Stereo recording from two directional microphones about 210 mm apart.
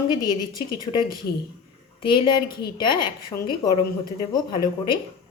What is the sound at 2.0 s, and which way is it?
A woman's voice, 25° left (ahead or behind).